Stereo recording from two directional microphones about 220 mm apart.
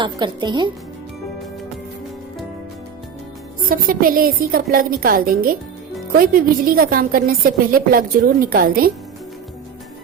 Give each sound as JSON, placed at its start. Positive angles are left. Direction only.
{"t": 0.0, "sound": "a woman's voice", "side_deg": -20}
{"t": 3.7, "sound": "a woman's voice", "side_deg": -40}